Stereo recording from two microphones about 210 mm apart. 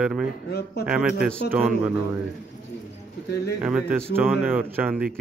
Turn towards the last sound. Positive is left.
turn(degrees=-5)  # may be behind; listen again after turning